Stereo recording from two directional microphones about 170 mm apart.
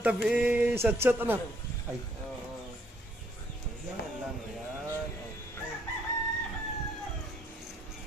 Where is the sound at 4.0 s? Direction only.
75° left (ahead or behind).